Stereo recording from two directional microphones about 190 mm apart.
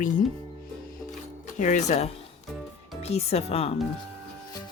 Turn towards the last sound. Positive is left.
turn(degrees=35)  # may be behind; listen again after turning